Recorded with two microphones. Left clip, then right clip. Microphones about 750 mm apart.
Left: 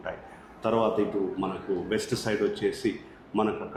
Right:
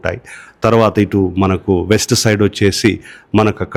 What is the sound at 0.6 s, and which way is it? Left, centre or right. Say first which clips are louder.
Speech: right 14 dB; right.